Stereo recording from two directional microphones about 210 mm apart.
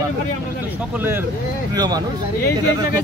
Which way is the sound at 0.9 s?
10° right (ahead or behind).